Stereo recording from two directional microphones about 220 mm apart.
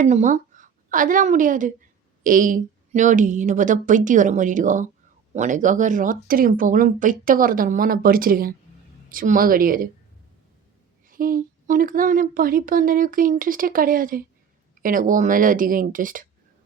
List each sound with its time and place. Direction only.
0.0 s a woman's voice: 35° right (ahead or behind)
11.1 s speech: 40° right (ahead or behind)